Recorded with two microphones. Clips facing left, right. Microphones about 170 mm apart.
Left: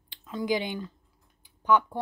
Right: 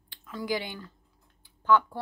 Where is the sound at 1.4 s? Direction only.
15° left (ahead or behind).